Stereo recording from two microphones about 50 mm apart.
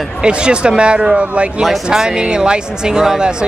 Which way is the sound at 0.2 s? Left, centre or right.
Centre.